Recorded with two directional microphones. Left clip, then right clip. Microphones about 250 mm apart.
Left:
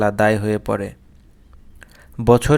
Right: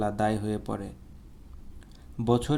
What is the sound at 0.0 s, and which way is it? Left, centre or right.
Speech, left.